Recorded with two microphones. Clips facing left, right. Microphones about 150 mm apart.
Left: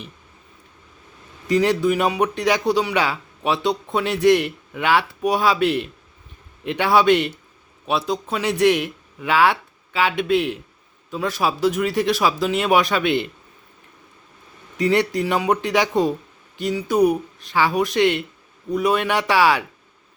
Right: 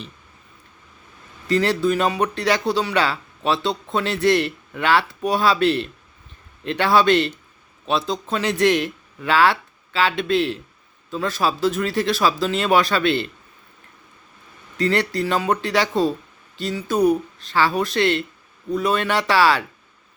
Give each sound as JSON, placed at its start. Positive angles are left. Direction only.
{"t": 1.5, "sound": "speech", "side_deg": 15}
{"t": 14.8, "sound": "speech", "side_deg": 15}